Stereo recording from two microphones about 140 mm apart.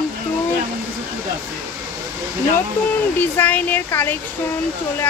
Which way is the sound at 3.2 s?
10° left (ahead or behind).